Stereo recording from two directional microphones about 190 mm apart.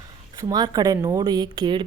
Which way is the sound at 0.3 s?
20° right (ahead or behind).